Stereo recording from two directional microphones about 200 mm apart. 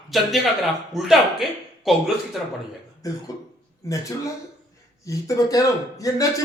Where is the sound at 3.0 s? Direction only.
15° left (ahead or behind).